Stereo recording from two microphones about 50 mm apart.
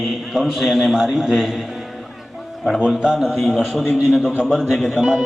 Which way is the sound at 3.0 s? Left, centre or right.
Centre.